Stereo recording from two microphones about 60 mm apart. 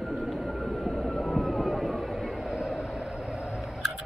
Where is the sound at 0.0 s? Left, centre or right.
Centre.